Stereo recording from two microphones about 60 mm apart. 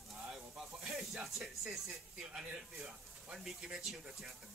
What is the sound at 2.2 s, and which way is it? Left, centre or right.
Speech, centre.